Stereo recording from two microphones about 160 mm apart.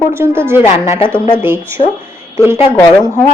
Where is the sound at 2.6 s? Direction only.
25° left (ahead or behind).